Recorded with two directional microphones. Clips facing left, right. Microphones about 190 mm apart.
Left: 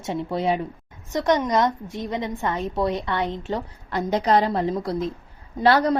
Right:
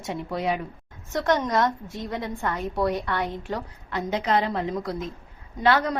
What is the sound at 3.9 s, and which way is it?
A woman's voice, 40° left (ahead or behind).